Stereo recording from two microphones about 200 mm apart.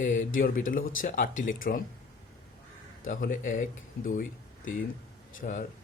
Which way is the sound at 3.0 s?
40° left (ahead or behind).